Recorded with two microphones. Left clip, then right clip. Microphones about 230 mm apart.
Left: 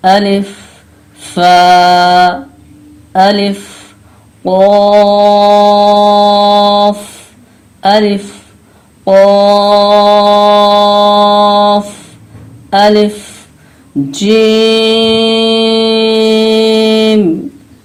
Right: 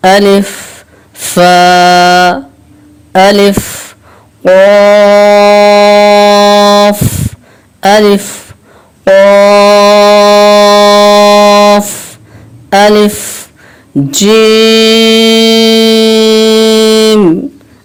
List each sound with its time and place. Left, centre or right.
0.0 s speech: right
1.2 s a sound: right
3.1 s speech: right
4.7 s music: right
7.8 s a sound: right
9.2 s music: right
12.7 s speech: right
14.1 s mantra: right